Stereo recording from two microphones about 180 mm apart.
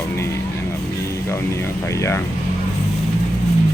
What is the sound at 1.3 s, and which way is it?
Speech, 15° left (ahead or behind).